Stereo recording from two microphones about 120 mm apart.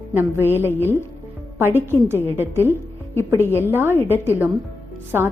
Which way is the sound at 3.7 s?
20° right (ahead or behind).